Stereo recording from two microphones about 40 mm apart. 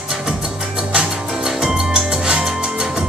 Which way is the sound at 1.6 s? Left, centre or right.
Centre.